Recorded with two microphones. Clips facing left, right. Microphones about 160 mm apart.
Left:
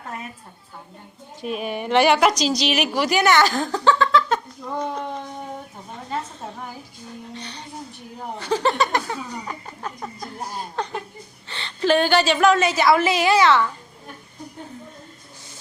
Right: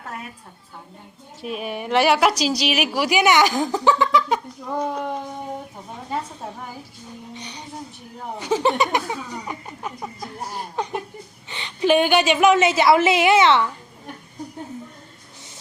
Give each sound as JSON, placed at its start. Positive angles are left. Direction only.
{"t": 1.4, "sound": "a woman's voice", "side_deg": 0}
{"t": 6.1, "sound": "a sound", "side_deg": -10}
{"t": 8.4, "sound": "a woman's voice", "side_deg": -15}